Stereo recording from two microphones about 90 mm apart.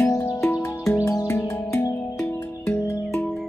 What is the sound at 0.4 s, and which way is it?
Music, 30° left (ahead or behind).